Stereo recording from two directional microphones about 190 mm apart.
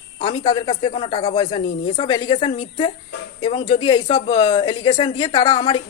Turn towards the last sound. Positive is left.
turn(degrees=25)  # may be behind; listen again after turning